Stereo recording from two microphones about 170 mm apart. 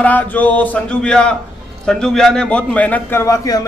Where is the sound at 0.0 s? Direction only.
10° left (ahead or behind).